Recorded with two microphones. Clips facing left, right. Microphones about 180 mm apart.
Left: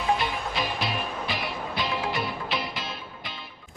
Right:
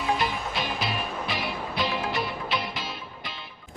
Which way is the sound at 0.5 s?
Centre (ahead or behind).